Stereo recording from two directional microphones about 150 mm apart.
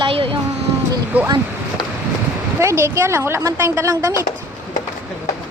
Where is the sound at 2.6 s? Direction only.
20° right (ahead or behind).